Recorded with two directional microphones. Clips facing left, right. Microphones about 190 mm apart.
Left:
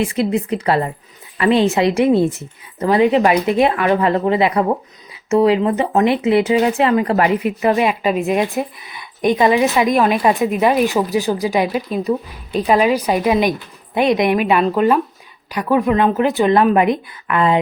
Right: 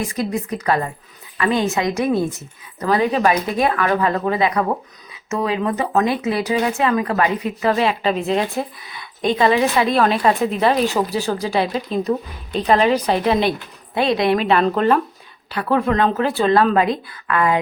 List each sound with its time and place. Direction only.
0.0 s speech: 30° left (ahead or behind)
7.6 s a woman's voice: 15° left (ahead or behind)